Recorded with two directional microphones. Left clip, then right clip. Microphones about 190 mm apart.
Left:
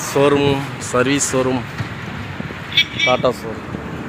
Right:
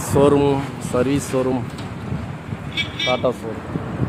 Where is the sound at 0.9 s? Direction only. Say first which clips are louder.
Left 3 dB; centre (ahead or behind).